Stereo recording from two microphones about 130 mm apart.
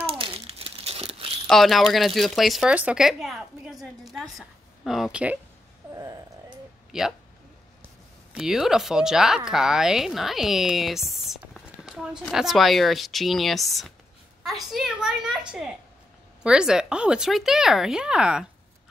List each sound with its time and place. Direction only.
0.0 s crumpling: 45° right (ahead or behind)
1.5 s a woman's voice: centre (ahead or behind)
6.9 s speech: 5° right (ahead or behind)
8.4 s speech: 5° right (ahead or behind)